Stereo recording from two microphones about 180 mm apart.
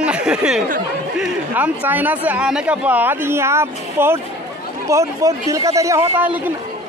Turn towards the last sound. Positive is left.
turn(degrees=-10)  # may be behind; listen again after turning